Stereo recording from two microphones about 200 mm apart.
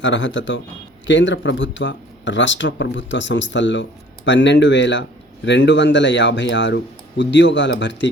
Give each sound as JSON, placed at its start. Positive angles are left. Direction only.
{"t": 0.0, "sound": "speech", "side_deg": 65}